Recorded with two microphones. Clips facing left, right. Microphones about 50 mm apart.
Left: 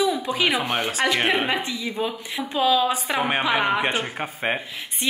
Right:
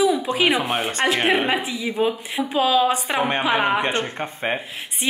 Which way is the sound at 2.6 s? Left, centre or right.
Right.